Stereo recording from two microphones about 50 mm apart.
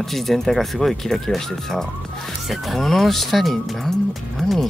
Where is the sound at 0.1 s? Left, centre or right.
Centre.